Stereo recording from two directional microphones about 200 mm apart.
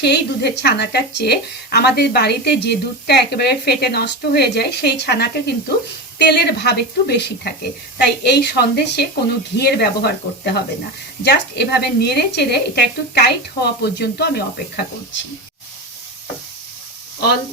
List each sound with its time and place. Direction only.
0.0 s a woman's voice: 55° left (ahead or behind)